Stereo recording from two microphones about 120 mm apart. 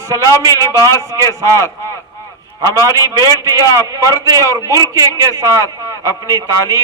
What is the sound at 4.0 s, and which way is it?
A man's voice, 30° right (ahead or behind).